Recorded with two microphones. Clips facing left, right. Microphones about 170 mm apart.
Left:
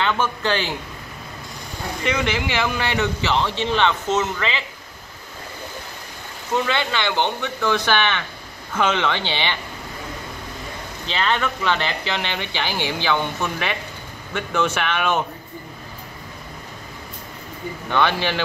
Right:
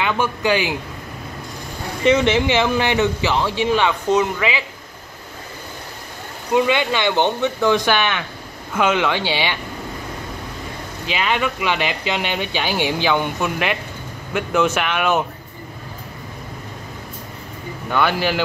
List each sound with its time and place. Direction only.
0.0 s speech: 10° right (ahead or behind)
2.0 s speech: 20° right (ahead or behind)
6.5 s speech: 15° right (ahead or behind)
11.1 s speech: 10° right (ahead or behind)
17.8 s speech: 10° right (ahead or behind)